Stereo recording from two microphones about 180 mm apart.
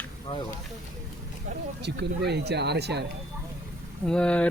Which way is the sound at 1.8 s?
70° right (ahead or behind).